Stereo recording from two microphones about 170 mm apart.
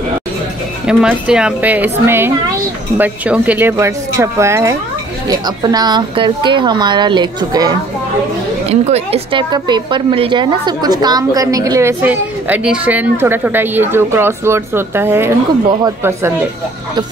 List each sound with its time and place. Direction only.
0.8 s a woman's voice: 5° right (ahead or behind); by 7.7 s 25° right (ahead or behind)
8.6 s a woman's voice: 40° right (ahead or behind); by 16.4 s 15° right (ahead or behind)